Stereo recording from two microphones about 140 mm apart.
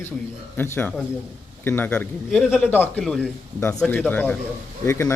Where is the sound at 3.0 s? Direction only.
5° left (ahead or behind); by 5.1 s 20° left (ahead or behind).